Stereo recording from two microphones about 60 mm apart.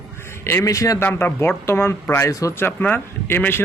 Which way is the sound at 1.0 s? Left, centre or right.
Left.